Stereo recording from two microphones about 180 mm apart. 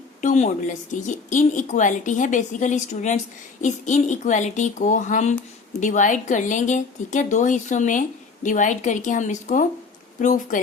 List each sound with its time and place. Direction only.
0.2 s a woman's voice: 45° left (ahead or behind)